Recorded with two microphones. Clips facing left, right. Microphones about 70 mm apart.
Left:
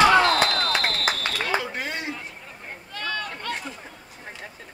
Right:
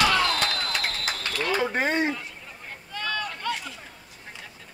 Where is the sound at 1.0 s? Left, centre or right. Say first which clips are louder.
Left 4 dB; left.